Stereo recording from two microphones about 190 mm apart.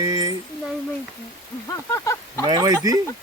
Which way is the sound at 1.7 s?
15° left (ahead or behind).